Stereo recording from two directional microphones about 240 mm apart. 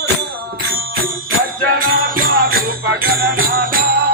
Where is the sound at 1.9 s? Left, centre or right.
Right.